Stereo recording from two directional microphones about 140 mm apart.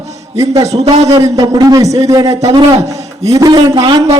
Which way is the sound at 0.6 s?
50° right (ahead or behind).